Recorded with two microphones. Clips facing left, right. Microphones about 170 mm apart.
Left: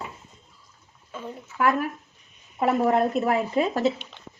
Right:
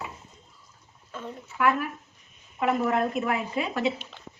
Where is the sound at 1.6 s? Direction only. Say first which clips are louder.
Left 2 dB; 40° left (ahead or behind).